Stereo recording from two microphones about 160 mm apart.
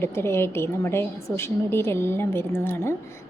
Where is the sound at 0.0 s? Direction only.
15° left (ahead or behind).